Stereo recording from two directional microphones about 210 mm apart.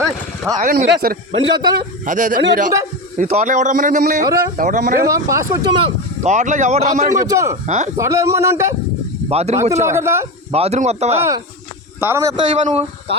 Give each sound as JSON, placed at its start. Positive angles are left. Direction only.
{"t": 0.5, "sound": "speech", "side_deg": -35}
{"t": 0.9, "sound": "a man's voice", "side_deg": -45}
{"t": 1.3, "sound": "speech", "side_deg": -20}
{"t": 2.0, "sound": "speech", "side_deg": -40}
{"t": 4.3, "sound": "a man's voice", "side_deg": -15}
{"t": 4.5, "sound": "speech", "side_deg": -40}
{"t": 5.1, "sound": "a man's voice", "side_deg": -15}
{"t": 6.2, "sound": "speech", "side_deg": -35}
{"t": 7.3, "sound": "a man's voice", "side_deg": -15}
{"t": 9.3, "sound": "speech", "side_deg": -30}
{"t": 9.8, "sound": "a man's voice", "side_deg": -15}
{"t": 10.5, "sound": "speech", "side_deg": -30}
{"t": 11.9, "sound": "a man's voice", "side_deg": -10}